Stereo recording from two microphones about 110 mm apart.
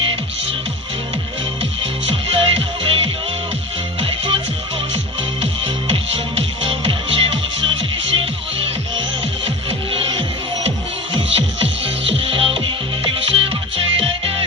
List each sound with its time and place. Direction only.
1.8 s music: 60° right (ahead or behind)
5.4 s music: 65° right (ahead or behind)